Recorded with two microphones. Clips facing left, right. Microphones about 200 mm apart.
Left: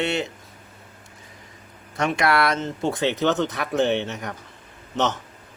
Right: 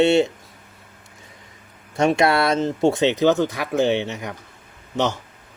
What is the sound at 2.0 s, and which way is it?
Speech, 25° right (ahead or behind).